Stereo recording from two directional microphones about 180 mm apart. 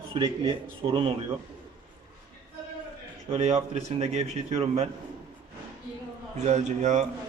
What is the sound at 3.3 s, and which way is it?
Speech, 40° right (ahead or behind).